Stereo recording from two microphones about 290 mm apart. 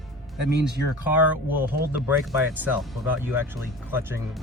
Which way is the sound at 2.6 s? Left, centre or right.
Centre.